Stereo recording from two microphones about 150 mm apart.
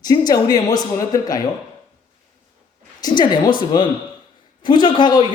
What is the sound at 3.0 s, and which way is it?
A man's voice, 30° left (ahead or behind).